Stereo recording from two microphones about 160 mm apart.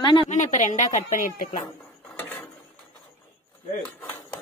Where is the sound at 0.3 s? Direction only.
50° left (ahead or behind).